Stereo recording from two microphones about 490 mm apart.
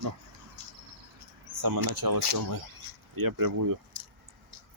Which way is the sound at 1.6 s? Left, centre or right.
Right.